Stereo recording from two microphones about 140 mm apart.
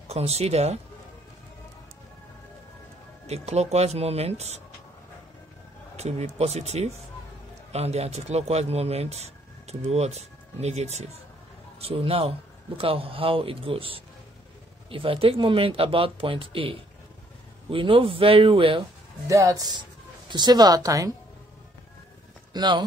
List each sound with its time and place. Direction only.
0.1 s speech: 50° right (ahead or behind)
3.3 s speech: 50° right (ahead or behind)
5.9 s a man's voice: 50° right (ahead or behind)
19.2 s a woman's voice: 25° right (ahead or behind)
22.5 s speech: 30° right (ahead or behind)